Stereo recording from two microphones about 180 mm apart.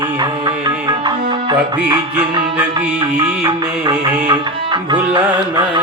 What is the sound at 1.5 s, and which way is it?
Music, 25° right (ahead or behind).